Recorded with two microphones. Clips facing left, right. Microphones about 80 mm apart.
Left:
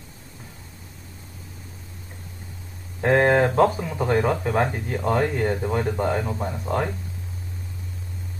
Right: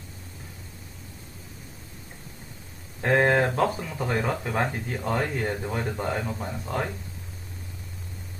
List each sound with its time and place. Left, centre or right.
3.0 s speech: centre
3.3 s speech: centre